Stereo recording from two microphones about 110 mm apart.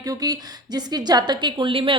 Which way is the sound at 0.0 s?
35° right (ahead or behind).